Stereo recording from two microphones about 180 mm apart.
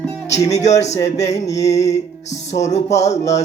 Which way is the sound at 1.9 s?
40° left (ahead or behind).